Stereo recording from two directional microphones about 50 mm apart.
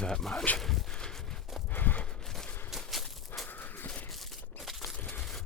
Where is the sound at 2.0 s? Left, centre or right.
Centre.